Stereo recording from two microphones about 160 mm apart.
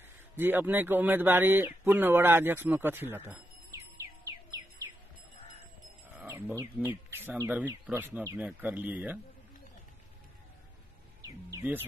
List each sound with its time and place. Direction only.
0.4 s speech: 15° right (ahead or behind)
6.2 s speech: 15° right (ahead or behind)
11.2 s speech: 15° right (ahead or behind)